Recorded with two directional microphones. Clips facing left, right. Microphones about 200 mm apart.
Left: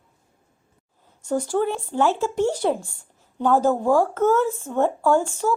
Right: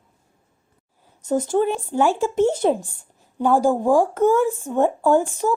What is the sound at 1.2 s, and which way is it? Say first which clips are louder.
Speech: right 3 dB; 20° right (ahead or behind).